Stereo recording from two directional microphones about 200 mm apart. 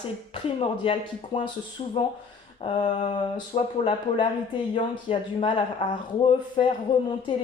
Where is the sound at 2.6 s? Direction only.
25° left (ahead or behind).